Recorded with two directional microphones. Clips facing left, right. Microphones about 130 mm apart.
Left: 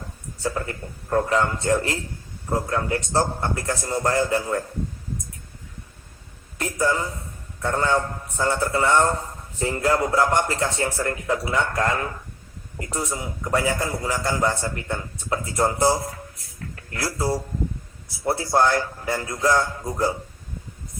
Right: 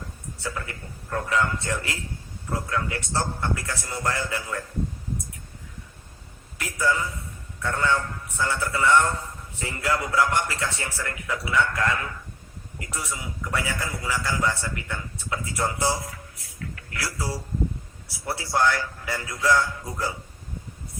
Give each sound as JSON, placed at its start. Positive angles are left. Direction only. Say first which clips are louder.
{"t": 0.4, "sound": "a man's voice", "louder": "left 6 dB", "side_deg": 35}
{"t": 6.6, "sound": "a man's voice", "louder": "left 2 dB", "side_deg": 30}
{"t": 16.9, "sound": "a man's voice", "louder": "left 6 dB", "side_deg": 30}
{"t": 18.3, "sound": "a man's voice", "louder": "left 4 dB", "side_deg": 30}